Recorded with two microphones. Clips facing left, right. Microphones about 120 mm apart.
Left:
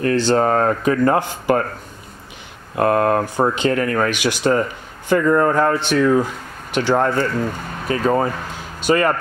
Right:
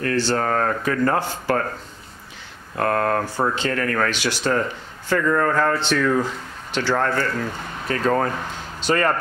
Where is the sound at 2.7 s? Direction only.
15° left (ahead or behind).